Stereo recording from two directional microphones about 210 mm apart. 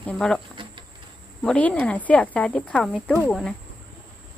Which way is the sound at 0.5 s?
25° right (ahead or behind).